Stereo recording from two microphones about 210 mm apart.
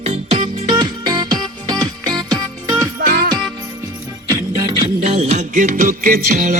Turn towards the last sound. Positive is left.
turn(degrees=-40)  # may be behind; listen again after turning